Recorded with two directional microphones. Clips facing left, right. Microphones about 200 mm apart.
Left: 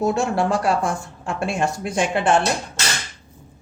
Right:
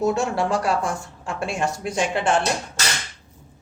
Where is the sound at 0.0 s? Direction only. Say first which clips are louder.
Left 1 dB; 55° left (ahead or behind).